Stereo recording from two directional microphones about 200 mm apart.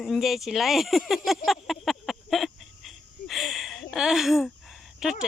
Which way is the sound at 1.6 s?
Centre (ahead or behind).